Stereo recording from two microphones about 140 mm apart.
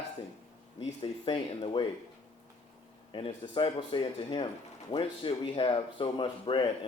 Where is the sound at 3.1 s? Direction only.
40° left (ahead or behind).